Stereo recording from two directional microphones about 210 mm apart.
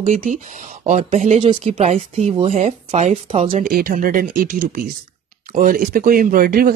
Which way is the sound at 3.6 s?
45° right (ahead or behind).